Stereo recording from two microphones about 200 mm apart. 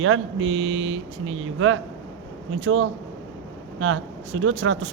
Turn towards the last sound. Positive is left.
turn(degrees=-80)